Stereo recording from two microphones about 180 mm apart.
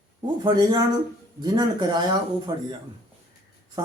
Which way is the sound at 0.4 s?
25° right (ahead or behind).